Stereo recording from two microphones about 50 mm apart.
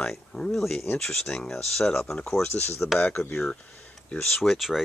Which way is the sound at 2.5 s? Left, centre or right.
Left.